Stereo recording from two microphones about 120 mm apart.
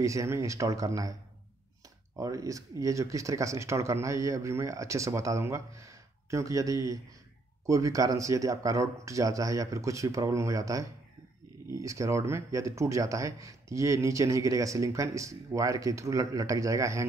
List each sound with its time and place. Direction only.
0.0 s speech: 25° right (ahead or behind)
2.1 s speech: 30° right (ahead or behind)